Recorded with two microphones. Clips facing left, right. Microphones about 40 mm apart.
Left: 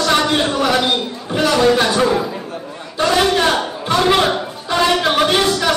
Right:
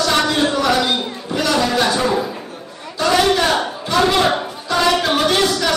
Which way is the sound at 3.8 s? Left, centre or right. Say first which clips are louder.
Left 2 dB; left.